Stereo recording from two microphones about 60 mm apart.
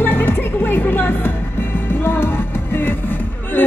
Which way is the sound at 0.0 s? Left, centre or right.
Left.